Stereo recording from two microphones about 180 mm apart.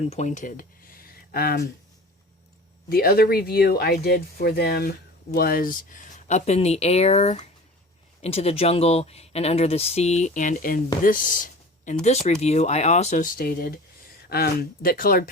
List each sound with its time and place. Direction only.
0.0 s speech: 40° left (ahead or behind); by 1.7 s 55° left (ahead or behind)
2.9 s speech: 55° left (ahead or behind)
12.0 s speech: 35° left (ahead or behind)